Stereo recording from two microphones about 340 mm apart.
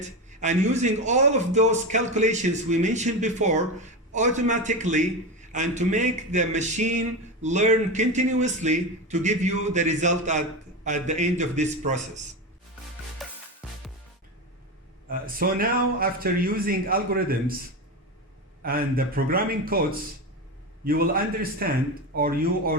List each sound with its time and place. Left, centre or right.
0.3 s a man's voice: right
15.1 s a man's voice: right
18.6 s a man's voice: right